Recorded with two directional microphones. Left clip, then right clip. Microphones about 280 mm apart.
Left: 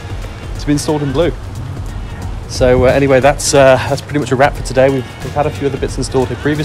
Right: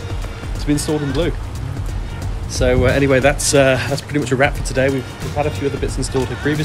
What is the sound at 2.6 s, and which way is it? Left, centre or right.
Speech, centre.